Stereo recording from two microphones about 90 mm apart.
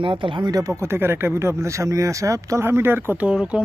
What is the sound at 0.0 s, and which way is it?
Speech, 65° right (ahead or behind).